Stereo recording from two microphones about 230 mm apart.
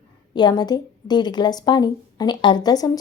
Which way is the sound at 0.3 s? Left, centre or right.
Centre.